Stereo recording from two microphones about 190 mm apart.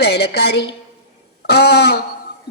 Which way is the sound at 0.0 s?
60° left (ahead or behind).